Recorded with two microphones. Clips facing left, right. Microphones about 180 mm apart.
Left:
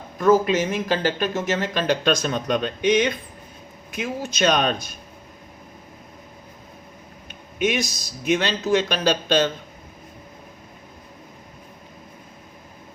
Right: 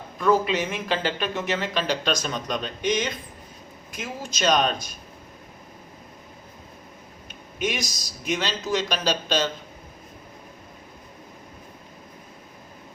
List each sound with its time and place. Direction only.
0.2 s speech: 45° left (ahead or behind)
7.6 s speech: 55° left (ahead or behind)